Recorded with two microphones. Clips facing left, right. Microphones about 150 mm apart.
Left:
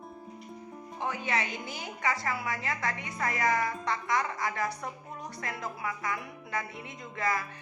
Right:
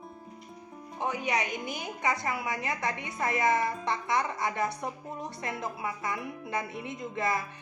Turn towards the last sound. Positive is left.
turn(degrees=-20)  # may be behind; listen again after turning